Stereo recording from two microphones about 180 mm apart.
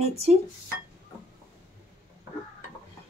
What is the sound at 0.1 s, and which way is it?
Speech, 35° right (ahead or behind).